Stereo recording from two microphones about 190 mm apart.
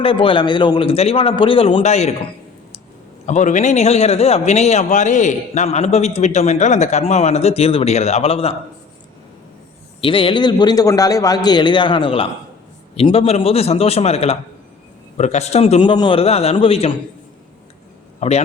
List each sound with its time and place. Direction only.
0.0 s a man's voice: 30° left (ahead or behind)
3.2 s a man's voice: 40° left (ahead or behind)
10.0 s a man's voice: 25° left (ahead or behind)
18.2 s a man's voice: 35° left (ahead or behind)